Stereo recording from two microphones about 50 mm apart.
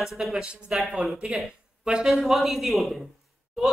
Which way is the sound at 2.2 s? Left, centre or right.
Centre.